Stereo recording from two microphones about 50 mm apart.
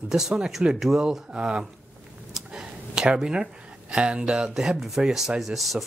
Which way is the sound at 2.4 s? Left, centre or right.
Centre.